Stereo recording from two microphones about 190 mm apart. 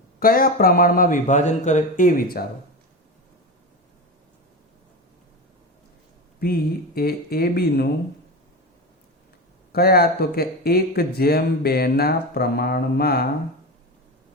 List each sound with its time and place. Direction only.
0.2 s speech: 50° left (ahead or behind)
6.4 s speech: 55° left (ahead or behind)
9.7 s speech: 55° left (ahead or behind)